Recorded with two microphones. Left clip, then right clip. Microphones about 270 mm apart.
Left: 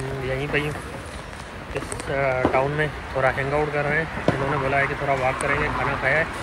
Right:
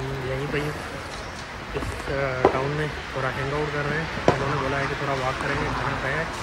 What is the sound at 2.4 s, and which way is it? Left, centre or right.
Speech, right.